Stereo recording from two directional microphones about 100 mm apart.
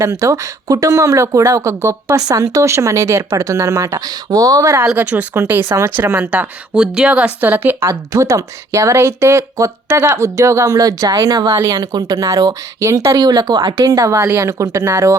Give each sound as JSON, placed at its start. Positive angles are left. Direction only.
{"t": 0.0, "sound": "a woman's voice", "side_deg": -35}
{"t": 4.0, "sound": "a woman's voice", "side_deg": -40}
{"t": 4.9, "sound": "speech", "side_deg": -15}
{"t": 7.4, "sound": "a woman's voice", "side_deg": -20}
{"t": 13.1, "sound": "a woman's voice", "side_deg": -45}